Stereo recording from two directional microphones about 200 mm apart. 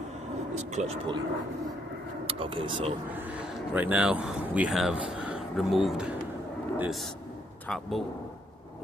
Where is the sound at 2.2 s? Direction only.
25° right (ahead or behind).